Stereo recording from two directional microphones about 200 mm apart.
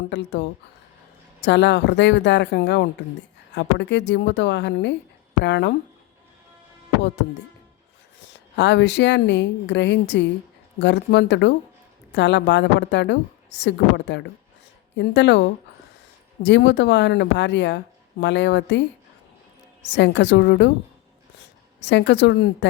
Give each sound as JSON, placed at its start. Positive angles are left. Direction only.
{"t": 0.1, "sound": "a woman's voice", "side_deg": 60}
{"t": 8.2, "sound": "a woman's voice", "side_deg": 60}
{"t": 19.9, "sound": "a woman's voice", "side_deg": 60}
{"t": 21.8, "sound": "a woman's voice", "side_deg": 60}